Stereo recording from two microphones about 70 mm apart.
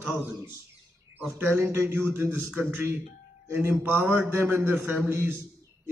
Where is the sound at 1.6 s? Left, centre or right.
Right.